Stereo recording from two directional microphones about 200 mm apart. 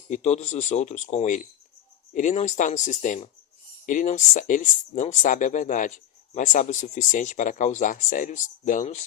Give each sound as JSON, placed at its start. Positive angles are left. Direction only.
{"t": 0.1, "sound": "speech", "side_deg": 35}